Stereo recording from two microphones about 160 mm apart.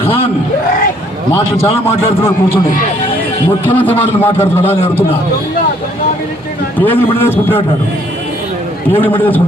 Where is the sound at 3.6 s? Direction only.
10° left (ahead or behind).